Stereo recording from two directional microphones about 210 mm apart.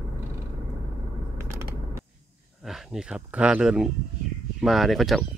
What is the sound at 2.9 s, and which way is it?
Speech, 5° right (ahead or behind).